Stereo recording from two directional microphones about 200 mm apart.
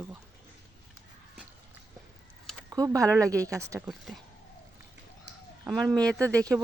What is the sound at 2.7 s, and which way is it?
Speech, 15° right (ahead or behind).